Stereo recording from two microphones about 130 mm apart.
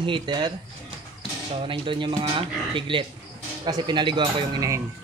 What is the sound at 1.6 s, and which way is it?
Speech, 40° right (ahead or behind).